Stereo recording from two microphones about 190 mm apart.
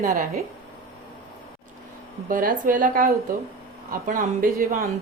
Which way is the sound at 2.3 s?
45° right (ahead or behind).